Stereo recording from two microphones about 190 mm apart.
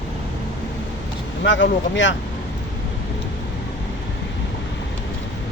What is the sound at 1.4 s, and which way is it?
Speech, 75° left (ahead or behind).